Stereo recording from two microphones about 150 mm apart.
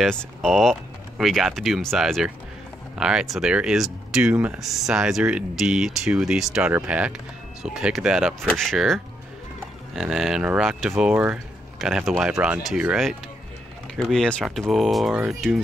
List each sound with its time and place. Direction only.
0.0 s speech: centre (ahead or behind)